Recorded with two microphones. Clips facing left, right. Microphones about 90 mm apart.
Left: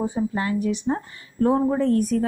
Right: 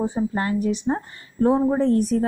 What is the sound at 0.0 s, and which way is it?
Speech, 35° right (ahead or behind).